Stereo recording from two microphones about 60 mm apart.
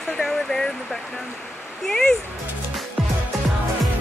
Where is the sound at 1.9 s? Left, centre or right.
Centre.